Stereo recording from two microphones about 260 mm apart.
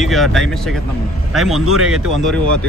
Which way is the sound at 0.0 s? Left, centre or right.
Centre.